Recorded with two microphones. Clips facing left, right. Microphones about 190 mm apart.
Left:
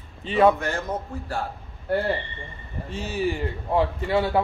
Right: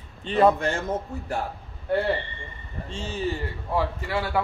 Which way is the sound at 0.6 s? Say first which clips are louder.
Right 1 dB; 30° right (ahead or behind).